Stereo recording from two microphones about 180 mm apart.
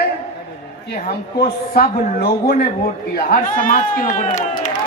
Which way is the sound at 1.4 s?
60° left (ahead or behind).